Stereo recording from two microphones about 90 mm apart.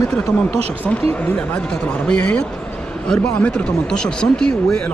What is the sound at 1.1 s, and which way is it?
A man's voice, 15° left (ahead or behind).